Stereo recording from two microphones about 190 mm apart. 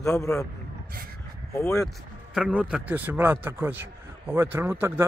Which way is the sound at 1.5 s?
15° left (ahead or behind).